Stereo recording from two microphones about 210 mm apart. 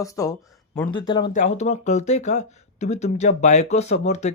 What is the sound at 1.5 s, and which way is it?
Speech, 35° left (ahead or behind).